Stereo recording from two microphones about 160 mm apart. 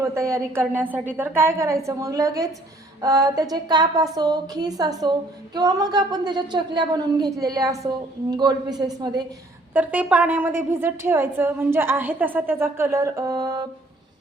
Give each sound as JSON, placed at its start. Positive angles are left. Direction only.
{"t": 0.0, "sound": "a woman's voice", "side_deg": -20}
{"t": 9.7, "sound": "a woman's voice", "side_deg": -10}